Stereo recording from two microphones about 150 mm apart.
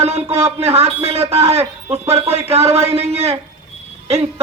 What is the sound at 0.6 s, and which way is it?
A man's voice, 45° right (ahead or behind).